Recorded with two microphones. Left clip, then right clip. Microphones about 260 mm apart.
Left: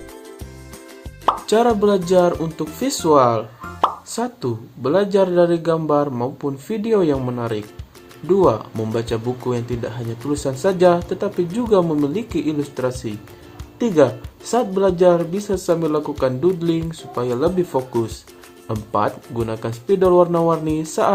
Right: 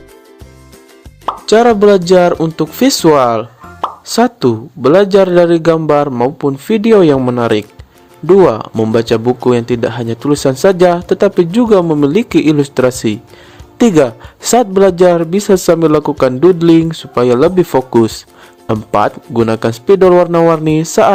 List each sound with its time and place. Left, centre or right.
1.2 s plop: centre
1.5 s speech: right